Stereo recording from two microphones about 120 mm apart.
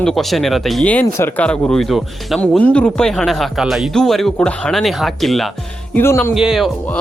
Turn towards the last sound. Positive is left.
turn(degrees=-5)  # may be behind; listen again after turning